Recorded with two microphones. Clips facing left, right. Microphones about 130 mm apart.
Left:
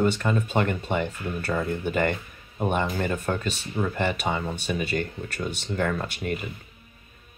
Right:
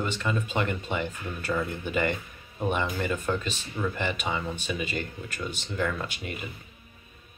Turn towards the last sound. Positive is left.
turn(degrees=45)  # may be behind; listen again after turning